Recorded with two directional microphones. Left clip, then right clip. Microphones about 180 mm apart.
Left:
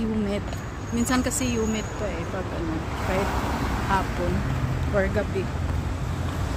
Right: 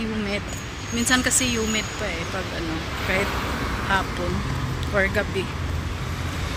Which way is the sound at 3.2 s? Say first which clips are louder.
Right 1 dB; 50° left (ahead or behind).